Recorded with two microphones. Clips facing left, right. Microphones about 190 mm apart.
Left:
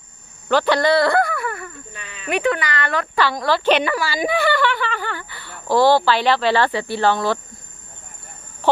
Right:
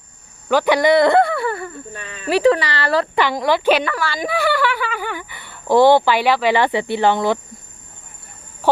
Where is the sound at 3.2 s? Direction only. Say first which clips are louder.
Right 2 dB; 15° right (ahead or behind).